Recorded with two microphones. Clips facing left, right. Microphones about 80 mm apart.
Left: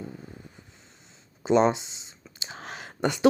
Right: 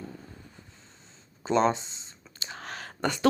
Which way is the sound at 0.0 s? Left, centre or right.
Centre.